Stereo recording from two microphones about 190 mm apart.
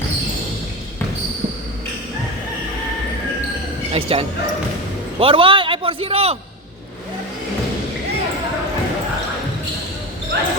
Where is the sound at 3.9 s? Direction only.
30° right (ahead or behind).